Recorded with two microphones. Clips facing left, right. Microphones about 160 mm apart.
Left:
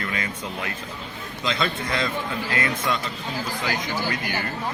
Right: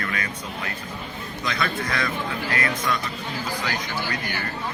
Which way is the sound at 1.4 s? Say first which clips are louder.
Left 1 dB; 25° left (ahead or behind).